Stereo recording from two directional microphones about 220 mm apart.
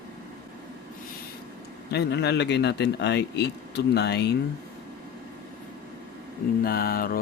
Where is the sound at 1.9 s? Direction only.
50° left (ahead or behind).